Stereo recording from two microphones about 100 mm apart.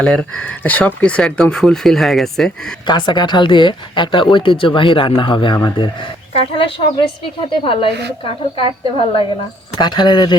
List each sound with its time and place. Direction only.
0.0 s speech: 10° left (ahead or behind)
2.8 s speech: 50° left (ahead or behind)
6.6 s speech: 60° left (ahead or behind)
9.7 s speech: 45° left (ahead or behind)